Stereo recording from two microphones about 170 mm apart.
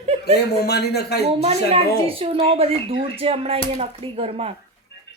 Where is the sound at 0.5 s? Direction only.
70° left (ahead or behind).